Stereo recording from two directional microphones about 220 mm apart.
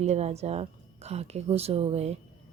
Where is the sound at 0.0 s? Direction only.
30° right (ahead or behind).